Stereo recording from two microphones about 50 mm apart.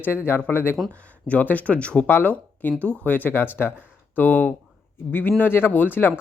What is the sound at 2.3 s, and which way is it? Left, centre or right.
Speech, left.